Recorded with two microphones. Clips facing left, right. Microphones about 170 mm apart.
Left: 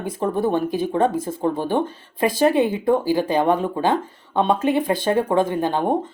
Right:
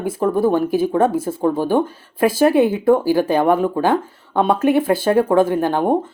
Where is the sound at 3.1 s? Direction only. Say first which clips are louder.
Right 3 dB; 15° left (ahead or behind).